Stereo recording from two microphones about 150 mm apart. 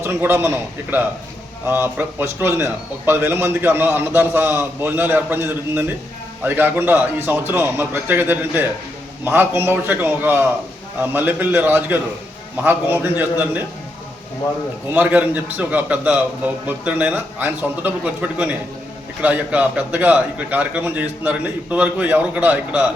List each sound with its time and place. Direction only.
0.0 s a man's voice: 15° right (ahead or behind)
14.9 s a man's voice: 10° right (ahead or behind)